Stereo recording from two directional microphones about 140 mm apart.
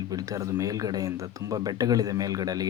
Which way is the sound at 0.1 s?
25° right (ahead or behind).